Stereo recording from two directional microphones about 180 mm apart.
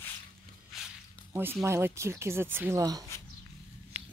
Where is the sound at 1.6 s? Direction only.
15° right (ahead or behind).